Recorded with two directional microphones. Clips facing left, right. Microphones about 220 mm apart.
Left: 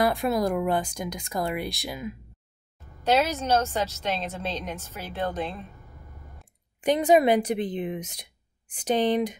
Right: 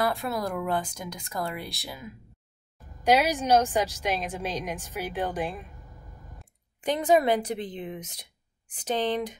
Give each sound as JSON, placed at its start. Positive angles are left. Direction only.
{"t": 0.0, "sound": "speech", "side_deg": 15}
{"t": 3.0, "sound": "a woman's voice", "side_deg": -15}
{"t": 6.8, "sound": "speech", "side_deg": 15}